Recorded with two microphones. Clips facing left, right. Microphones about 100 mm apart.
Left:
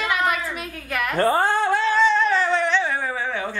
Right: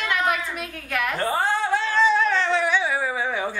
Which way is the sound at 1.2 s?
50° left (ahead or behind).